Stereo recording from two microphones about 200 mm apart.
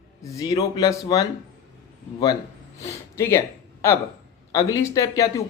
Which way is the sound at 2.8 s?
15° left (ahead or behind).